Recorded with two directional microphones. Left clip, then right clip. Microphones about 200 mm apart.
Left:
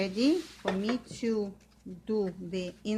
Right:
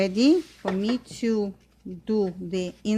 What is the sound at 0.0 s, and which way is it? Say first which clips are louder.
Speech: right 7 dB; 45° right (ahead or behind).